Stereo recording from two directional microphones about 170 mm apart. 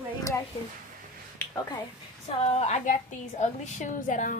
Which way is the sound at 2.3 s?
40° left (ahead or behind).